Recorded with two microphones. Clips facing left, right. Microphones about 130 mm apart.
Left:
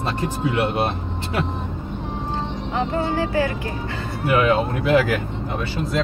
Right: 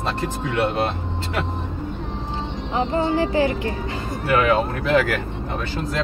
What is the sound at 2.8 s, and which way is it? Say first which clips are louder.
Music: right 2 dB; 20° right (ahead or behind).